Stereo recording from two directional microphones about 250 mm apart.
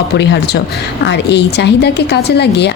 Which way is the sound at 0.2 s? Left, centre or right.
Left.